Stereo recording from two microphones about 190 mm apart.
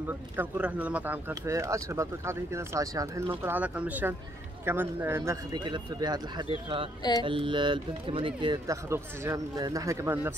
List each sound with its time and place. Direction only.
0.4 s speech: 5° right (ahead or behind)
7.0 s music: 20° left (ahead or behind)
7.2 s speech: 25° right (ahead or behind)